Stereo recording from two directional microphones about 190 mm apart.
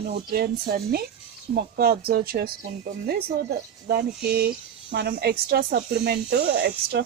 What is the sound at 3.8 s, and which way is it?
Speech, 55° right (ahead or behind).